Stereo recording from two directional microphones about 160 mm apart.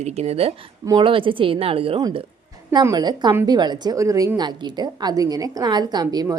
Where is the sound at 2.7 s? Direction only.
25° right (ahead or behind).